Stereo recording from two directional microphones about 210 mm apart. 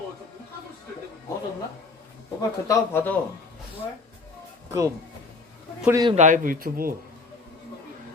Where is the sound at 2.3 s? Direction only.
15° left (ahead or behind).